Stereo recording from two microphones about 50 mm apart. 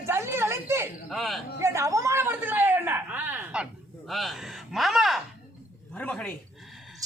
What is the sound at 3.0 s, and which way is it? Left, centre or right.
Speech, right.